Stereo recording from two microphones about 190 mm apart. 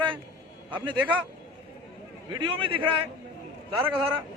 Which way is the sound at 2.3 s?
25° right (ahead or behind).